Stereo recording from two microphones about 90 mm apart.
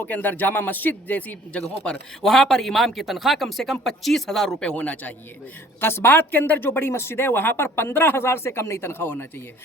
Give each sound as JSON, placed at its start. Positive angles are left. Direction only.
{"t": 0.0, "sound": "a man's voice", "side_deg": 20}